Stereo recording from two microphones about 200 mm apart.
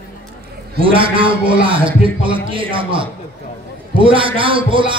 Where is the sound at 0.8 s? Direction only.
25° right (ahead or behind).